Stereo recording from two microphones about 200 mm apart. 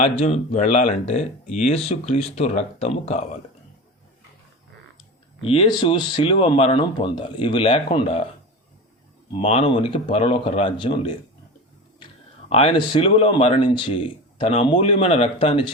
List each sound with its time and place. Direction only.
0.0 s speech: 35° left (ahead or behind)
5.4 s speech: 30° left (ahead or behind)
9.3 s speech: 30° left (ahead or behind)
12.5 s speech: 30° left (ahead or behind)